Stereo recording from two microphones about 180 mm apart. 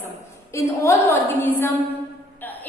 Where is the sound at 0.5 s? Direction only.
15° left (ahead or behind).